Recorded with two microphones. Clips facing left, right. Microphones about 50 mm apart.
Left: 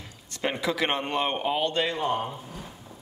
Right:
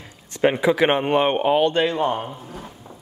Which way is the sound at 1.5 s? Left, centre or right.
Right.